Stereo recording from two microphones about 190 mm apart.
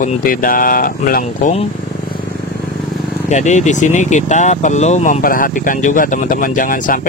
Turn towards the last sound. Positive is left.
turn(degrees=45)  # may be behind; listen again after turning